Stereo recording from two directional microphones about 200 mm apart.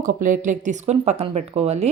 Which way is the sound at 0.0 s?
40° right (ahead or behind).